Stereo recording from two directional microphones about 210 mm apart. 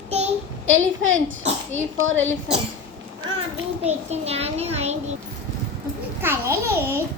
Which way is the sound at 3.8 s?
30° right (ahead or behind).